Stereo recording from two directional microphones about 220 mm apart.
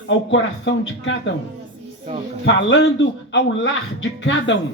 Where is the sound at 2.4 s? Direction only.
60° left (ahead or behind).